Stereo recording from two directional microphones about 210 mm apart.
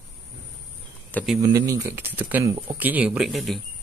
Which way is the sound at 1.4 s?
15° right (ahead or behind).